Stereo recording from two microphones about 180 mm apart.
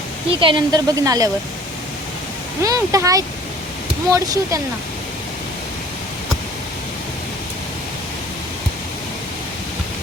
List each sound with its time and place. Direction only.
0.3 s speech: 30° right (ahead or behind)
2.6 s speech: 20° right (ahead or behind)